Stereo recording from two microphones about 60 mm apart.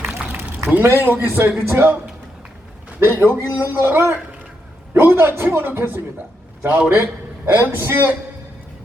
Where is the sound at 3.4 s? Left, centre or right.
Left.